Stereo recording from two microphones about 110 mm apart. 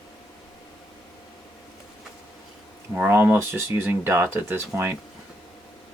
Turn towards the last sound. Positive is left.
turn(degrees=-20)  # may be behind; listen again after turning